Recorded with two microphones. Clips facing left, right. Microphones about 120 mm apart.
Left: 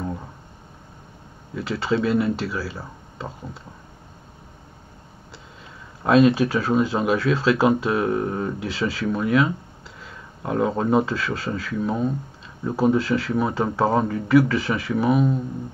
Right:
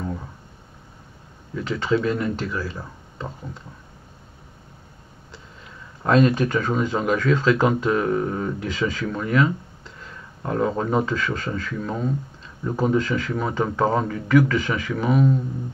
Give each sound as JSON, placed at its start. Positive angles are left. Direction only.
{"t": 1.5, "sound": "speech", "side_deg": 5}
{"t": 6.0, "sound": "speech", "side_deg": 5}